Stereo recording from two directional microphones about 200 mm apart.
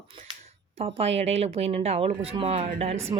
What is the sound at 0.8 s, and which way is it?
Speech, 30° right (ahead or behind).